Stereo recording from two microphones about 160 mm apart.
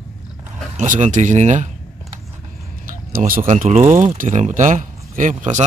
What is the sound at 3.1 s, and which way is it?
A man's voice, 60° right (ahead or behind).